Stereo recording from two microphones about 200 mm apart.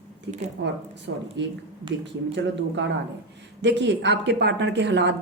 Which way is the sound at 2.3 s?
60° right (ahead or behind).